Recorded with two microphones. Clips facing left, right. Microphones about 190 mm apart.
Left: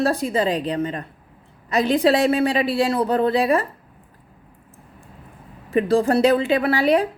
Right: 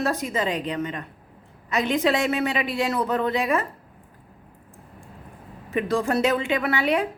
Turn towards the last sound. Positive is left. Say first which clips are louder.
# left 5 dB
turn(degrees=35)  # may be behind; listen again after turning